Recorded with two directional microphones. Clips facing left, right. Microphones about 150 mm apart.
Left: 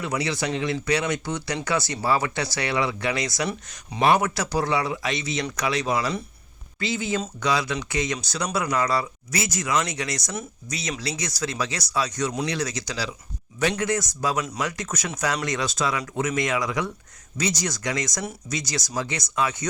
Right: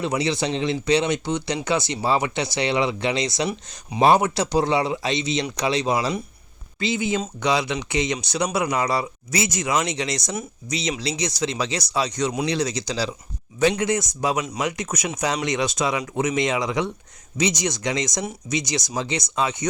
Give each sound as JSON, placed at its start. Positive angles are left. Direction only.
{"t": 0.0, "sound": "speech", "side_deg": -25}